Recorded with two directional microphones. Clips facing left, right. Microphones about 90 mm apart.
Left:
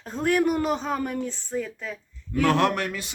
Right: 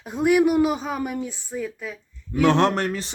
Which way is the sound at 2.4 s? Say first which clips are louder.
Right 3 dB; 30° right (ahead or behind).